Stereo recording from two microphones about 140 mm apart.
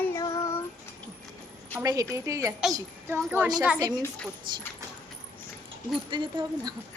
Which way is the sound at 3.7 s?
30° right (ahead or behind).